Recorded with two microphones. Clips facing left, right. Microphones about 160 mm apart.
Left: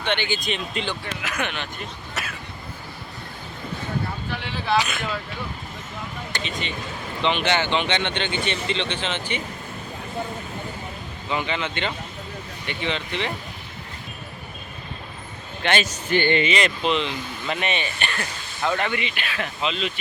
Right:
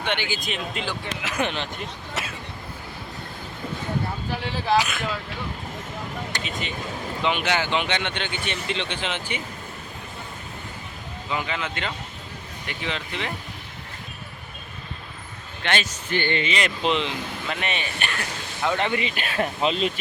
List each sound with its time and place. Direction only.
0.0 s speech: 10° right (ahead or behind)
1.2 s speech: 30° right (ahead or behind)
2.2 s vehicle: 25° right (ahead or behind)
4.3 s speech: 40° right (ahead or behind)
4.8 s speech: centre (ahead or behind)
6.3 s speech: 5° right (ahead or behind)
11.3 s speech: centre (ahead or behind)
16.3 s speech: 15° left (ahead or behind)
16.8 s speech: 20° right (ahead or behind)
17.5 s speech: centre (ahead or behind)
18.8 s speech: 30° right (ahead or behind)